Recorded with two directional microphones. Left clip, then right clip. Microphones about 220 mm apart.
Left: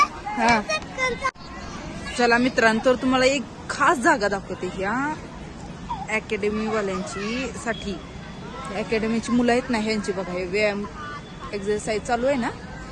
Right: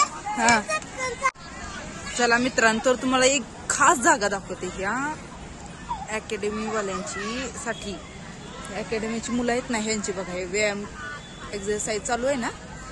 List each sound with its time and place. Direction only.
0.3 s music: 55° right (ahead or behind)
0.9 s vehicle: 20° left (ahead or behind)
2.0 s a woman's voice: 5° right (ahead or behind)